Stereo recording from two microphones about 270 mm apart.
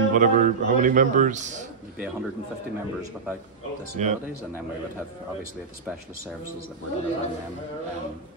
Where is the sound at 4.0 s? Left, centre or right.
Right.